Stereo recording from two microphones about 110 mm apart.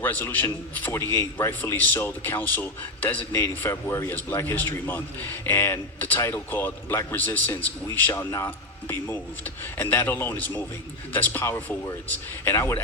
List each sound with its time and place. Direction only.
0.0 s a man's voice: 15° left (ahead or behind)
8.2 s a man's voice: 30° left (ahead or behind)
8.4 s a man's voice: 20° left (ahead or behind)